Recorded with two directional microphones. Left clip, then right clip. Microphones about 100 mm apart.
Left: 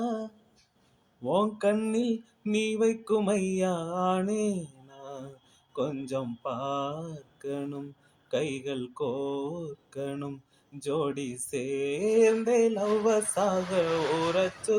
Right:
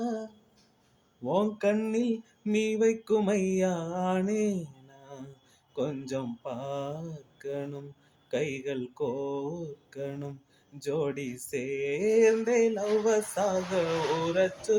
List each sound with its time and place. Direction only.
0.0 s a sound: 20° left (ahead or behind)
1.2 s music: 15° left (ahead or behind)
2.4 s a sound: 15° left (ahead or behind)
5.7 s mantra: 15° left (ahead or behind)
8.3 s music: 20° left (ahead or behind)
14.7 s mantra: 15° left (ahead or behind)